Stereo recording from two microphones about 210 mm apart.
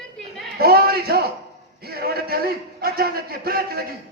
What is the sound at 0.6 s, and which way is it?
A man's voice, 45° right (ahead or behind).